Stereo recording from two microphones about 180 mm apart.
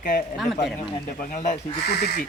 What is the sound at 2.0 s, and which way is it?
Speech, 60° left (ahead or behind).